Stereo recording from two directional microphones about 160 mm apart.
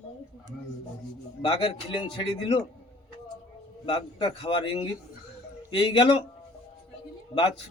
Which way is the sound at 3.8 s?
30° left (ahead or behind).